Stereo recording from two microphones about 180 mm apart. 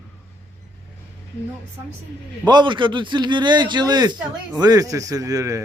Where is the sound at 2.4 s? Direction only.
25° right (ahead or behind).